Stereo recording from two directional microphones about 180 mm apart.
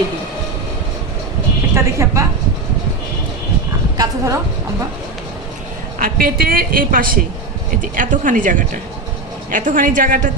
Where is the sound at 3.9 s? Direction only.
20° right (ahead or behind).